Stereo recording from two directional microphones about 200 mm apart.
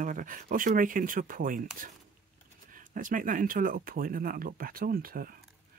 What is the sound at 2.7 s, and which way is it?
Speech, 40° right (ahead or behind).